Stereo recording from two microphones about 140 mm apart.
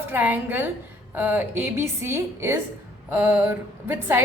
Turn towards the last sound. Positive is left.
turn(degrees=-15)  # may be behind; listen again after turning